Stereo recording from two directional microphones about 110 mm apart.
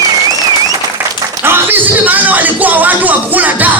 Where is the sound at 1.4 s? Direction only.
20° right (ahead or behind).